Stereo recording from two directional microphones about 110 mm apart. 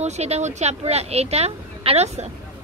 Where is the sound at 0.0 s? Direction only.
85° right.